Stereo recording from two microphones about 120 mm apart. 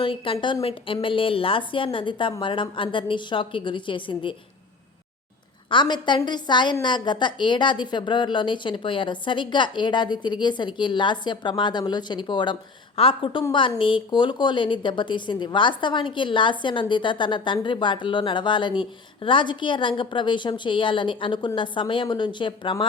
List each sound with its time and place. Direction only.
0.0 s a woman's voice: 45° left (ahead or behind)
5.7 s a woman's voice: 40° left (ahead or behind)